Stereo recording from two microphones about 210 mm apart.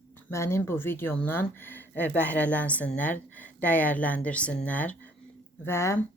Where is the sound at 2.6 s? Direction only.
5° left (ahead or behind).